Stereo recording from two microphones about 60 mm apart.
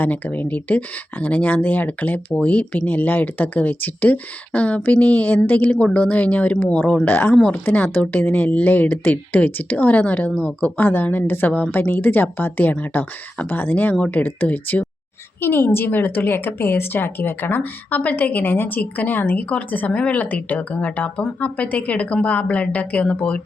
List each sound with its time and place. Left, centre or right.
0.0 s a woman's voice: left
15.4 s a woman's voice: left